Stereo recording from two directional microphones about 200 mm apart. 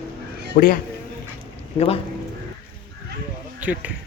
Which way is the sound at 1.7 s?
30° left (ahead or behind).